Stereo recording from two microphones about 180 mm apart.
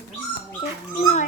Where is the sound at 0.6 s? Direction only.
45° left (ahead or behind).